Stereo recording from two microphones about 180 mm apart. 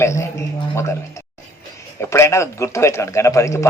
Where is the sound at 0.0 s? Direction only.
15° left (ahead or behind).